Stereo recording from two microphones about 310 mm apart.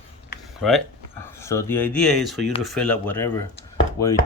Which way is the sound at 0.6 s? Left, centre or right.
Centre.